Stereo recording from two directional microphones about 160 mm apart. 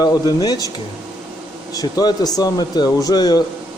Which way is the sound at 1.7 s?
25° left (ahead or behind).